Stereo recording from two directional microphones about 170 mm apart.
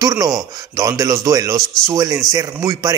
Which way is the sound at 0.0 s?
20° right (ahead or behind).